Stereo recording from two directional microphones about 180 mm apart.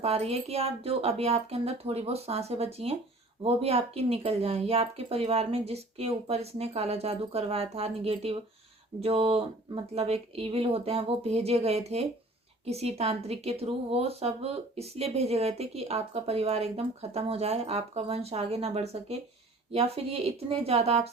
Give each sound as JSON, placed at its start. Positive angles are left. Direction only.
{"t": 0.0, "sound": "speech", "side_deg": -35}